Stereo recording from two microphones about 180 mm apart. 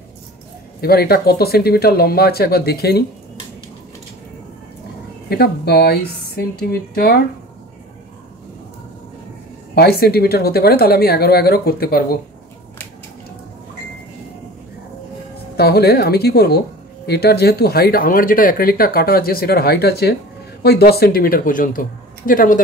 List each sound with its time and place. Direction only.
0.7 s speech: 60° left (ahead or behind)
5.3 s speech: 60° left (ahead or behind)
9.8 s speech: 60° left (ahead or behind)
15.5 s speech: 60° left (ahead or behind)